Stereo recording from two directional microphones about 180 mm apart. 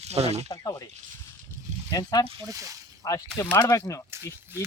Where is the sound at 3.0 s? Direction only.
20° left (ahead or behind).